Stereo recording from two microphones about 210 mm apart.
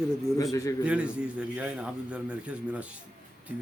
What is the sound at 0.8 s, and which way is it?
A man's voice, 5° right (ahead or behind).